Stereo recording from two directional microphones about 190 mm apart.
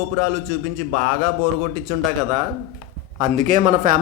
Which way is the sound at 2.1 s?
40° right (ahead or behind).